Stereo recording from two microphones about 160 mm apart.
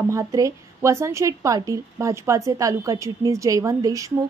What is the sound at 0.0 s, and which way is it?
A woman's voice, 20° right (ahead or behind).